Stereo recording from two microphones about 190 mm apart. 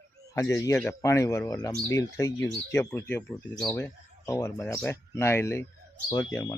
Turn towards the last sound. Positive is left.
turn(degrees=15)  # may be behind; listen again after turning